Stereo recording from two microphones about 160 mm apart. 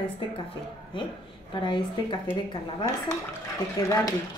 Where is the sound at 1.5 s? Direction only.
30° left (ahead or behind).